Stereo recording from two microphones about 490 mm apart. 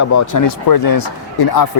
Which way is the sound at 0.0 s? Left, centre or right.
Left.